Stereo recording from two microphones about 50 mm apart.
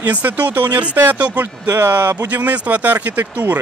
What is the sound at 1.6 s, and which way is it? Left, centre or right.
Speech, right.